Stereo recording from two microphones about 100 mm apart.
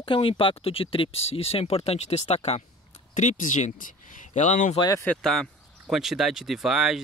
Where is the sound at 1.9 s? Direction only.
90° left.